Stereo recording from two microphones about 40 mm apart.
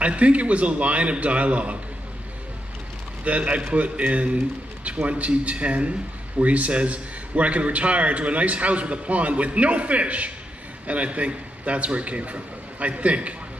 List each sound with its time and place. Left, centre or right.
0.0 s a man's voice: right
3.3 s a man's voice: right